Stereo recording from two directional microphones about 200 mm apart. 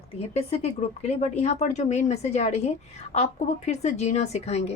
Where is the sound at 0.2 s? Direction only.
30° left (ahead or behind).